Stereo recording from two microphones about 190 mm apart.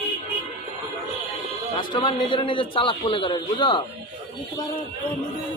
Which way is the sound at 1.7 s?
25° left (ahead or behind).